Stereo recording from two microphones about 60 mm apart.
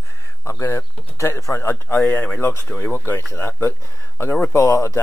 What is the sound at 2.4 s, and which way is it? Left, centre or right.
Speech, left.